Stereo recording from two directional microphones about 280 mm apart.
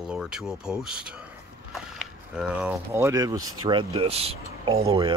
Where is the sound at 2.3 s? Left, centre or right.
Centre.